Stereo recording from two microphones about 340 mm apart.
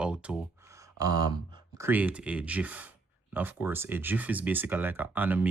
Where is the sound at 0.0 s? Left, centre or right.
Centre.